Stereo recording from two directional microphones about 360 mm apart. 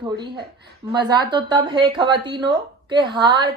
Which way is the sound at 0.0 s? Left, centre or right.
Centre.